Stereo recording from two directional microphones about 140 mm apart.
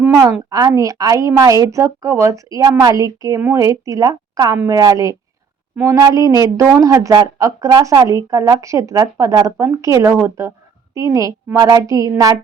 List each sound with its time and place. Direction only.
0.0 s speech: 15° right (ahead or behind)